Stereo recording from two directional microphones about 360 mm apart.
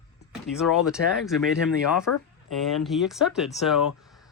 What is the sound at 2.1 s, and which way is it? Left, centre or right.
Speech, left.